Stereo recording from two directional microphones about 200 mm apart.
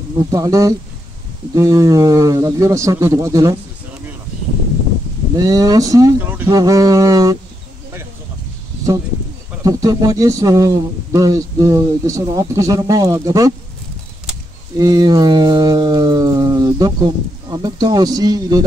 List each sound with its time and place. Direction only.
0.2 s speech: 15° right (ahead or behind)
5.3 s speech: 20° right (ahead or behind)
9.6 s speech: 15° right (ahead or behind)
14.8 s speech: 20° right (ahead or behind)